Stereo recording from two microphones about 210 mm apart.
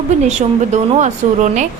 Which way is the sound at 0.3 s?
35° right (ahead or behind).